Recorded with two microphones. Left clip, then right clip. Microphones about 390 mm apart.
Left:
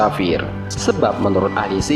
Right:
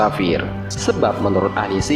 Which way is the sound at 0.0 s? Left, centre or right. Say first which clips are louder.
Left 1 dB; left.